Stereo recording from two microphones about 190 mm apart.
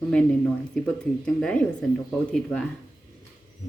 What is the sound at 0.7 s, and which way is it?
Speech, 5° left (ahead or behind).